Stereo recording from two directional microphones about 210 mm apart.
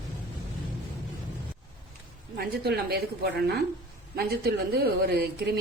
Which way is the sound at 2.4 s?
45° right (ahead or behind).